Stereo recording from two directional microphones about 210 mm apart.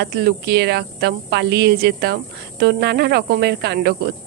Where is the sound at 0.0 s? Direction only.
50° right (ahead or behind).